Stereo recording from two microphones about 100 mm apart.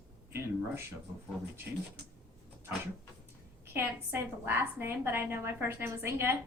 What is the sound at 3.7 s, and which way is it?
A woman's voice, 20° right (ahead or behind).